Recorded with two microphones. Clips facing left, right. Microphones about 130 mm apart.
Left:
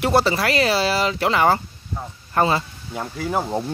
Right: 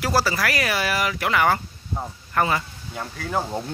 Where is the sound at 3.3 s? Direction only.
15° left (ahead or behind).